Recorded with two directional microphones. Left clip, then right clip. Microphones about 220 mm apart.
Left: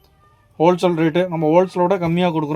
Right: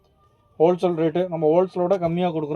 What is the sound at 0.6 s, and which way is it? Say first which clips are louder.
Speech: left 3 dB; 45° left (ahead or behind).